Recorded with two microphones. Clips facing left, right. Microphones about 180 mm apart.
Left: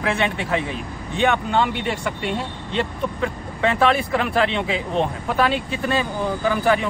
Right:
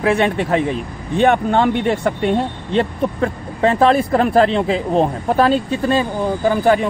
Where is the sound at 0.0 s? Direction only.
40° right (ahead or behind).